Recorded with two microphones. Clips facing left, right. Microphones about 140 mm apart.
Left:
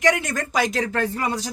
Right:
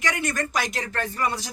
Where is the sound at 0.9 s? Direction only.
90° left.